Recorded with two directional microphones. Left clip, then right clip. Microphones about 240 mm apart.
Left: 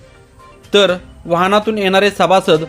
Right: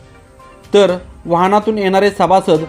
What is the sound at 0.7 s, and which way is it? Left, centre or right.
Speech, centre.